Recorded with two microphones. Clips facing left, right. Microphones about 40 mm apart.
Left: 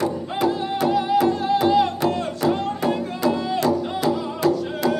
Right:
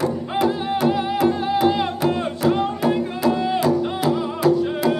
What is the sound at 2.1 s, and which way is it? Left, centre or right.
Music, centre.